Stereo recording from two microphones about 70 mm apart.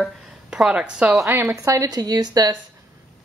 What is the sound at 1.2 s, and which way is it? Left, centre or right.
Speech, right.